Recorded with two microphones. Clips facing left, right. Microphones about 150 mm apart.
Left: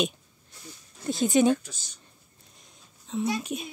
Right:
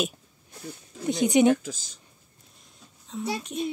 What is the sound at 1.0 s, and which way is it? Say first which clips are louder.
Speech: right 2 dB; 20° right (ahead or behind).